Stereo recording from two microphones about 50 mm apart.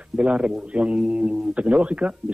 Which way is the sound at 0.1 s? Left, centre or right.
Right.